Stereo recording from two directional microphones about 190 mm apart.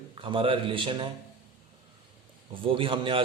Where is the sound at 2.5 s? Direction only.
25° right (ahead or behind).